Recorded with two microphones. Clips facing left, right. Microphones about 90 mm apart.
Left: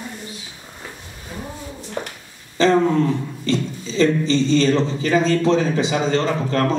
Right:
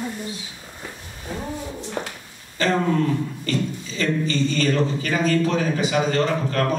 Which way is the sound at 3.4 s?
25° left (ahead or behind).